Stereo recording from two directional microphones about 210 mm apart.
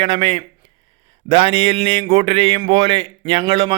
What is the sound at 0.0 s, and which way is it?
A man's voice, 25° right (ahead or behind).